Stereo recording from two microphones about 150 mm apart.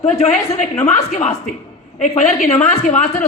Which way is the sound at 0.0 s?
45° left (ahead or behind).